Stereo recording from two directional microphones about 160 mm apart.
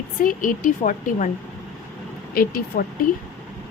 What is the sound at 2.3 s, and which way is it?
Speech, 70° left (ahead or behind).